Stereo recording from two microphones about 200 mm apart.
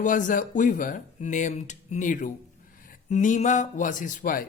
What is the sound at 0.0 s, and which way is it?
A man's voice, 40° left (ahead or behind).